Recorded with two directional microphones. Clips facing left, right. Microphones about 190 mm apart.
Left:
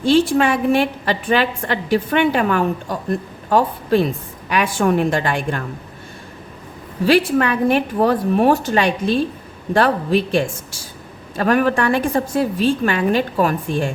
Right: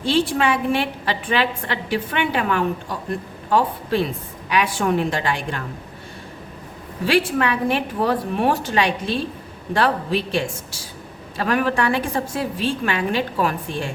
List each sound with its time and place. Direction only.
0.0 s a woman's voice: 45° left (ahead or behind)
7.1 s a woman's voice: 40° left (ahead or behind)